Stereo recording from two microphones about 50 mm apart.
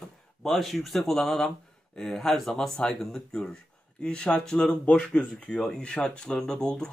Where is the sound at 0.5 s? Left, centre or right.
Centre.